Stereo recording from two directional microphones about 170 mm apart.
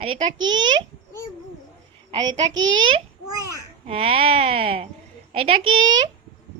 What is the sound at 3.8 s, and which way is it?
Speech, 35° right (ahead or behind).